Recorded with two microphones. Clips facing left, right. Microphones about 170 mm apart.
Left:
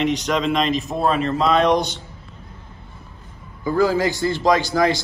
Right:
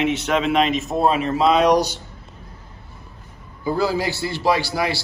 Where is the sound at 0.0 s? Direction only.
Centre (ahead or behind).